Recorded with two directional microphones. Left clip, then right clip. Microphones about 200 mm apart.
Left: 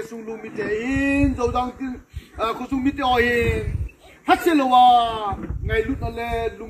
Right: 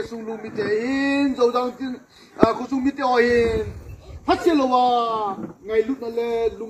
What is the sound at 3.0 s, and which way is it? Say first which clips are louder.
Speech: right 1 dB; 30° left (ahead or behind).